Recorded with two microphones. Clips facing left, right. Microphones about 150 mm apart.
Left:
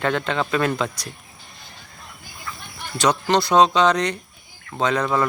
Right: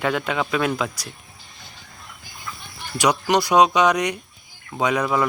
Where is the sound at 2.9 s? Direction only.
15° right (ahead or behind).